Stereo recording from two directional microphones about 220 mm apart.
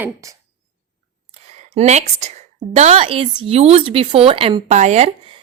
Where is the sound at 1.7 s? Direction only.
30° right (ahead or behind).